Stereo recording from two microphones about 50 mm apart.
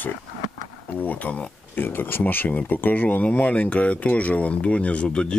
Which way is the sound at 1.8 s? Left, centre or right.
Left.